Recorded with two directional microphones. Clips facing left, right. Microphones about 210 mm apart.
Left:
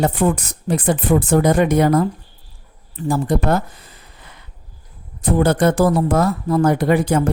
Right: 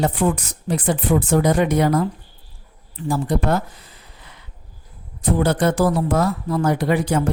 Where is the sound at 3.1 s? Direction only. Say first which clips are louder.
Left 2 dB; 50° left (ahead or behind).